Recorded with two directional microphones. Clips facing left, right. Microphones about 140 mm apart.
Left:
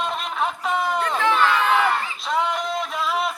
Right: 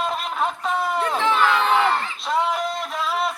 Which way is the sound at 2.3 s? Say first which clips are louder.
Right 1 dB; centre (ahead or behind).